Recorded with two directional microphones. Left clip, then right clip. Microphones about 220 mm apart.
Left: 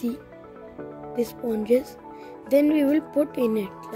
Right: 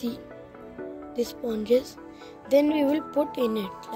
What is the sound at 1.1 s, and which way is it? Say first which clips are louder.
Speech: left 3 dB; 40° left (ahead or behind).